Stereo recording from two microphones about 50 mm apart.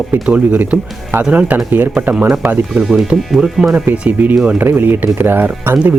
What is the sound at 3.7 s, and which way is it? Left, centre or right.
Speech, right.